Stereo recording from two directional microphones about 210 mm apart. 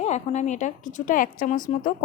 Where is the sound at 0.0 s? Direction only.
35° left (ahead or behind).